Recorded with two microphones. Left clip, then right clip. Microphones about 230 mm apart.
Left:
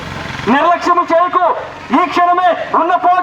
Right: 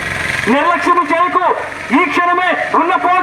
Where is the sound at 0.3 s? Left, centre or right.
Right.